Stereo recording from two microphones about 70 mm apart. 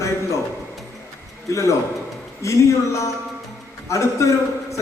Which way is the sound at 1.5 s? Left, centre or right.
Left.